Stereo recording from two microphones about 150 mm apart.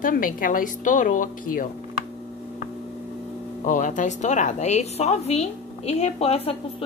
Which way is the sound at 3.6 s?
55° left (ahead or behind).